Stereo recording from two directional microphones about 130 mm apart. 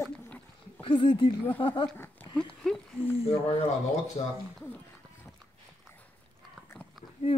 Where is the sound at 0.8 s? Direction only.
40° left (ahead or behind).